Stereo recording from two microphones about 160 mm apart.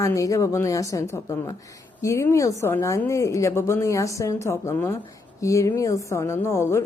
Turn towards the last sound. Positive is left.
turn(degrees=15)  # may be behind; listen again after turning